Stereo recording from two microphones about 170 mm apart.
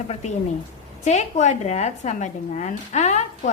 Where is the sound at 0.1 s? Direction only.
40° left (ahead or behind).